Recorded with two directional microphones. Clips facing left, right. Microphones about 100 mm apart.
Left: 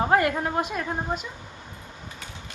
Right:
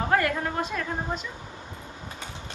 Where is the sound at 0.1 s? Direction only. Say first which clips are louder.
Left 3 dB; 20° left (ahead or behind).